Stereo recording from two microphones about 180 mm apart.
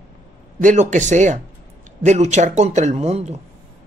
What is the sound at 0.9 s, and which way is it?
Speech, 40° right (ahead or behind).